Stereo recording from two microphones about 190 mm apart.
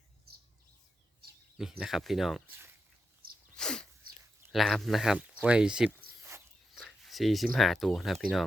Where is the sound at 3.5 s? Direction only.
5° left (ahead or behind).